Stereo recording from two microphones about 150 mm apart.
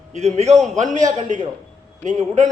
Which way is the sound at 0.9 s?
55° right (ahead or behind).